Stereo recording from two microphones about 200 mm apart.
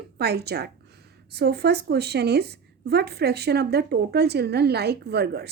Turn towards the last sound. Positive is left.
turn(degrees=-55)  # may be behind; listen again after turning